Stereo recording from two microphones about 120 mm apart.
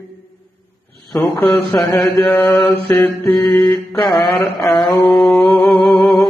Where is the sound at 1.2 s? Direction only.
20° left (ahead or behind).